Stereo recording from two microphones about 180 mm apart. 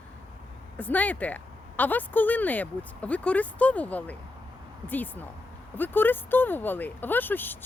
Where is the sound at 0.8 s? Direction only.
10° left (ahead or behind).